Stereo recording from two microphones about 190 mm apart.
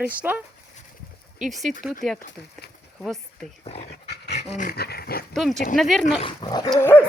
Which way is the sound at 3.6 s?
35° left (ahead or behind).